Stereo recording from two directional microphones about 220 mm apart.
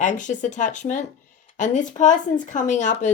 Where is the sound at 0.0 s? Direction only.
35° left (ahead or behind).